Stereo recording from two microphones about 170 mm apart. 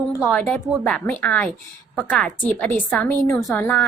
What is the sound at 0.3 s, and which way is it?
A woman's voice, 5° left (ahead or behind).